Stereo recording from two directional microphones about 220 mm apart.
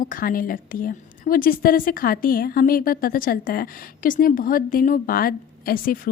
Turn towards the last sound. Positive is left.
turn(degrees=40)  # may be behind; listen again after turning